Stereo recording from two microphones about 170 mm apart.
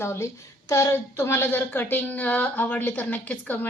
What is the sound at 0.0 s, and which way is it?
A woman's voice, 15° left (ahead or behind).